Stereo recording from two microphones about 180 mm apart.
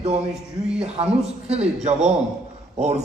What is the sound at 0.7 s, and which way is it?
A man's voice, 35° right (ahead or behind).